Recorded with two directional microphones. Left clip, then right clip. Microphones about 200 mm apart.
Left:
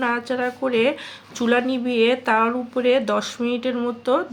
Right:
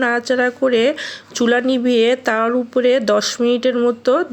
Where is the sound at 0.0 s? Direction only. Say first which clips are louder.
Right 6 dB; 30° right (ahead or behind).